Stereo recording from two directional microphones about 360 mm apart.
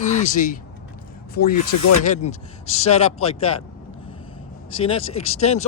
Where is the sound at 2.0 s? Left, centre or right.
Centre.